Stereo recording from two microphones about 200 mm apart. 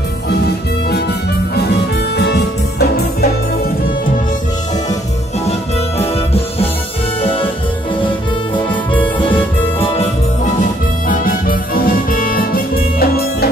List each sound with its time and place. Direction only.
0.8 s music: 55° left (ahead or behind)
5.9 s music: 30° left (ahead or behind)
9.8 s music: 30° left (ahead or behind)
11.1 s music: 45° left (ahead or behind)